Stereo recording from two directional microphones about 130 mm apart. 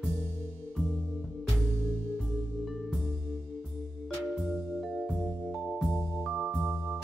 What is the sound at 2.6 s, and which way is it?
Music, centre (ahead or behind).